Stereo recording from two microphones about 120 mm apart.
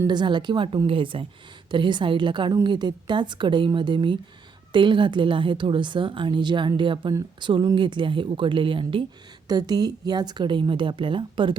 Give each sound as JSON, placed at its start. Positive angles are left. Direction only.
{"t": 0.1, "sound": "a woman's voice", "side_deg": -40}
{"t": 9.5, "sound": "a woman's voice", "side_deg": -35}